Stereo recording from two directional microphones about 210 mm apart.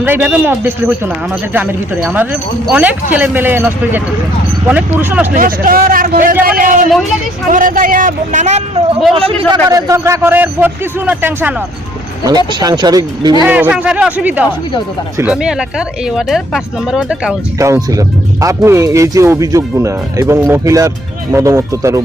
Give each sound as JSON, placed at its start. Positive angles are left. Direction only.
{"t": 0.0, "sound": "speech", "side_deg": -10}
{"t": 5.3, "sound": "a man's voice", "side_deg": -40}
{"t": 9.6, "sound": "speech", "side_deg": -15}
{"t": 12.5, "sound": "speech", "side_deg": -20}
{"t": 13.4, "sound": "speech", "side_deg": -5}
{"t": 17.6, "sound": "speech", "side_deg": -15}